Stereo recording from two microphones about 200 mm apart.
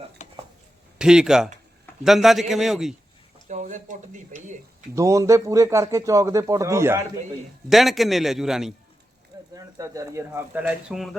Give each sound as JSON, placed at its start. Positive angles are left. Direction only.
{"t": 0.9, "sound": "a man's voice", "side_deg": -5}
{"t": 3.3, "sound": "speech", "side_deg": -40}
{"t": 4.9, "sound": "speech", "side_deg": -15}
{"t": 7.7, "sound": "a man's voice", "side_deg": 0}
{"t": 9.6, "sound": "speech", "side_deg": -15}